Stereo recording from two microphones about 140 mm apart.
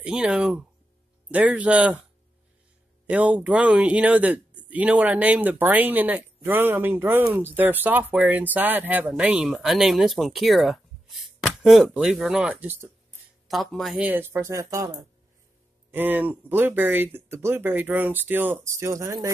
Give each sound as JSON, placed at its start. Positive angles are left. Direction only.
{"t": 0.0, "sound": "speech", "side_deg": -5}
{"t": 3.1, "sound": "speech", "side_deg": -10}
{"t": 13.5, "sound": "speech", "side_deg": 0}
{"t": 13.9, "sound": "speech", "side_deg": -15}
{"t": 15.9, "sound": "speech", "side_deg": -15}